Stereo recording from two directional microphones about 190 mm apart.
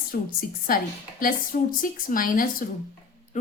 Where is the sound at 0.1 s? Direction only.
50° left (ahead or behind).